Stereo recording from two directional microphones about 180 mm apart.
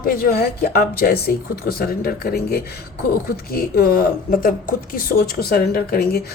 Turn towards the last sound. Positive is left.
turn(degrees=60)  # may be behind; listen again after turning